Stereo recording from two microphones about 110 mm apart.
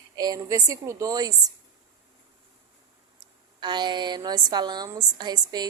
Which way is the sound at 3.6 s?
45° right (ahead or behind).